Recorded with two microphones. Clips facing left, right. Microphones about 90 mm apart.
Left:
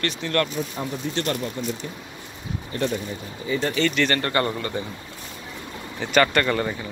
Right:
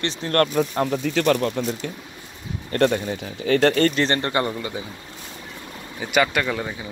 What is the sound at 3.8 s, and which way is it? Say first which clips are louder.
Speech: right 2 dB; 35° right (ahead or behind).